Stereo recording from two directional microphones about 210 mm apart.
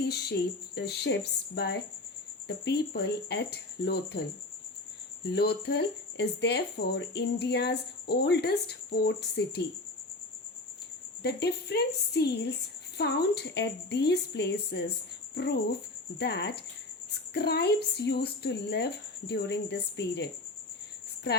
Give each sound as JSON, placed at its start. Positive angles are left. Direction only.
{"t": 0.0, "sound": "speech", "side_deg": 50}
{"t": 5.2, "sound": "speech", "side_deg": 50}
{"t": 11.2, "sound": "speech", "side_deg": 50}
{"t": 16.1, "sound": "speech", "side_deg": 50}